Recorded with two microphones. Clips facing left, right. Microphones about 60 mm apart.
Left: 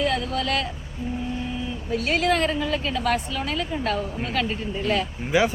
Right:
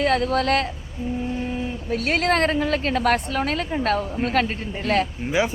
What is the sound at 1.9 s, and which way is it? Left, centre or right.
A woman's voice, right.